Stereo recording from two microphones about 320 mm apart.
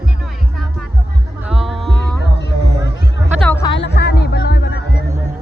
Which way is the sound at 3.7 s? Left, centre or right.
Left.